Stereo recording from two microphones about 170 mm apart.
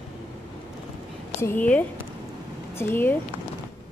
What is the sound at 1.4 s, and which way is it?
A woman's voice, 10° left (ahead or behind).